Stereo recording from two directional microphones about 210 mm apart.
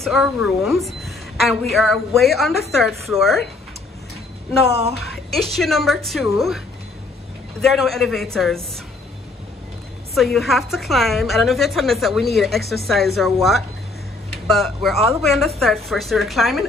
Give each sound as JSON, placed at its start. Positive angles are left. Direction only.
{"t": 0.0, "sound": "a woman's voice", "side_deg": 0}
{"t": 4.6, "sound": "a woman's voice", "side_deg": -30}
{"t": 4.9, "sound": "a woman's voice", "side_deg": 0}
{"t": 7.6, "sound": "a woman's voice", "side_deg": 0}
{"t": 10.1, "sound": "a woman's voice", "side_deg": 0}